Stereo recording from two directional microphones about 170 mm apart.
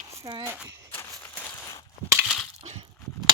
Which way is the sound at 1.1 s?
5° left (ahead or behind).